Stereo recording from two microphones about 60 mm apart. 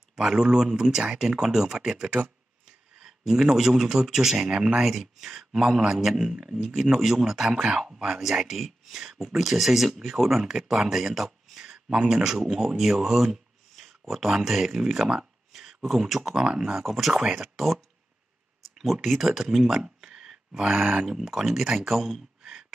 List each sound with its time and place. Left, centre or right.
0.1 s speech: centre
2.0 s speech: right
3.0 s speech: centre
17.1 s speech: centre
19.2 s speech: centre